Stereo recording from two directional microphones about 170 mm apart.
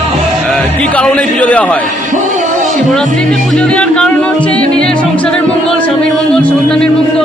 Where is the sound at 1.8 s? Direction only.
50° right (ahead or behind).